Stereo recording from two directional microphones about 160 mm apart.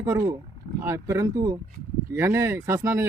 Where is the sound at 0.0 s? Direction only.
20° right (ahead or behind).